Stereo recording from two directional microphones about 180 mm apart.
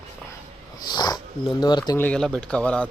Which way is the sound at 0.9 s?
25° left (ahead or behind).